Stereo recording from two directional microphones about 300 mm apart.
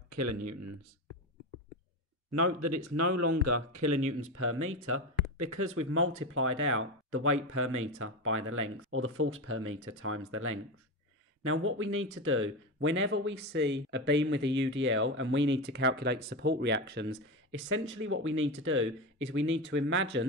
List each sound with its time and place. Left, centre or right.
0.1 s speech: right
2.3 s speech: right